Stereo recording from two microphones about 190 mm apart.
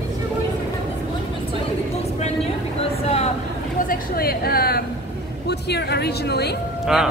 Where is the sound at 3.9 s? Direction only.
55° left (ahead or behind).